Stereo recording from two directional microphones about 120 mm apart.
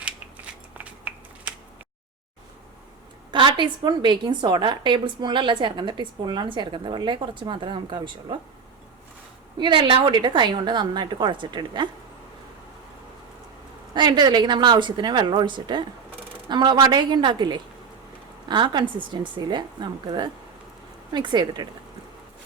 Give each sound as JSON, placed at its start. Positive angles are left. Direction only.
{"t": 0.8, "sound": "computer keyboard", "side_deg": -10}
{"t": 3.3, "sound": "a woman's voice", "side_deg": -40}
{"t": 9.6, "sound": "a woman's voice", "side_deg": -40}
{"t": 13.9, "sound": "a woman's voice", "side_deg": -40}